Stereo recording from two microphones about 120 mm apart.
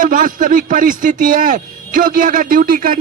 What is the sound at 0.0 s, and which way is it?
A man's voice, 90° right.